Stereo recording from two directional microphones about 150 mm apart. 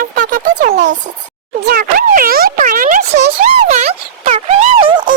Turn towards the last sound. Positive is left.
turn(degrees=-30)  # may be behind; listen again after turning